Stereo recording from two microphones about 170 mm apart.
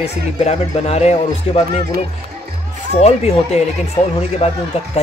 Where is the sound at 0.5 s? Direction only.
40° left (ahead or behind).